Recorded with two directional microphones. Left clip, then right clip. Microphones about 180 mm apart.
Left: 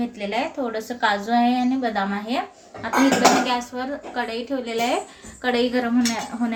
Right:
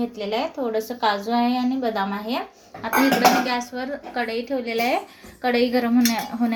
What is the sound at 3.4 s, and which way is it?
Dishes, 20° right (ahead or behind).